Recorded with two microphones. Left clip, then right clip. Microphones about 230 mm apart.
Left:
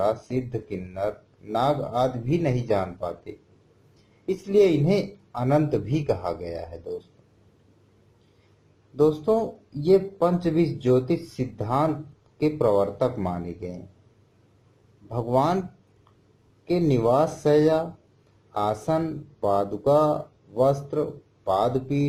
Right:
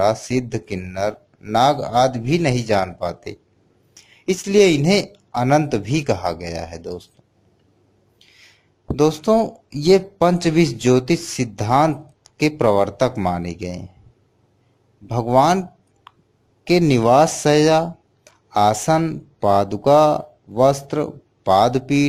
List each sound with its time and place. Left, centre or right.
0.0 s speech: right
9.0 s speech: right
15.1 s speech: right
16.6 s speech: right